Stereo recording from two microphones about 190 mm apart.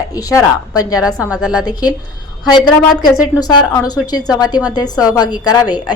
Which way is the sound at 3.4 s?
20° left (ahead or behind).